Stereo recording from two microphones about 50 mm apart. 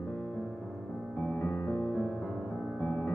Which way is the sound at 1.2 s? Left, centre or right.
Left.